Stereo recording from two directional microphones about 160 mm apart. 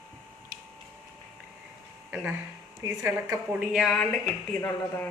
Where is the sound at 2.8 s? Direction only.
20° right (ahead or behind).